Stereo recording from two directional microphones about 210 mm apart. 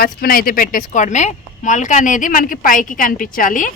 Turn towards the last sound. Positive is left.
turn(degrees=40)  # may be behind; listen again after turning